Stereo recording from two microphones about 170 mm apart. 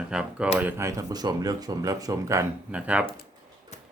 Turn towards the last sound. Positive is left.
turn(degrees=-5)  # may be behind; listen again after turning